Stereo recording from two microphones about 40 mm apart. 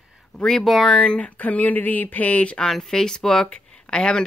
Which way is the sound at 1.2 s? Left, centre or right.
Left.